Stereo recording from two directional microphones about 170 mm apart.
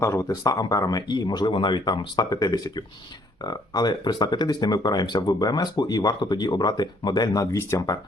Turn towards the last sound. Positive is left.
turn(degrees=20)  # may be behind; listen again after turning